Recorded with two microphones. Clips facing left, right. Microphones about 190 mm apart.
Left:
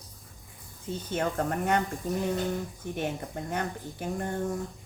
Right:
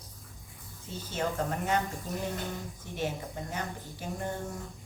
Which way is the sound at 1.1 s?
55° left (ahead or behind).